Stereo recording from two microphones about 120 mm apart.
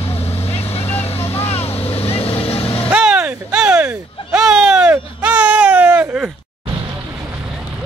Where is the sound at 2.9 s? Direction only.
10° right (ahead or behind).